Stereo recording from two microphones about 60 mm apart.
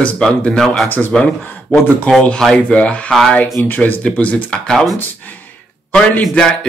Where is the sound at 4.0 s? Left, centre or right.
Left.